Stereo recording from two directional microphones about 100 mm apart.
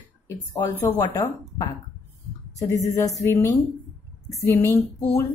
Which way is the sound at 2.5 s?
30° left (ahead or behind).